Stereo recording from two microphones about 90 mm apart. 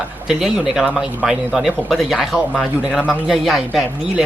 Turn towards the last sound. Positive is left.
turn(degrees=-5)  # may be behind; listen again after turning